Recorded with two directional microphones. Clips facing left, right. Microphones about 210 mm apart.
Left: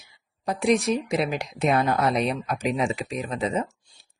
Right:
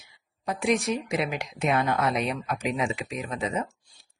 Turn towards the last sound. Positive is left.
turn(degrees=30)  # may be behind; listen again after turning